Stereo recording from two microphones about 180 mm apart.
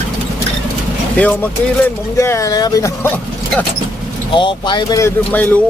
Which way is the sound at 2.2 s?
15° left (ahead or behind).